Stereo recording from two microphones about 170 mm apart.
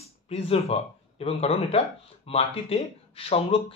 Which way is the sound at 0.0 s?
35° left (ahead or behind).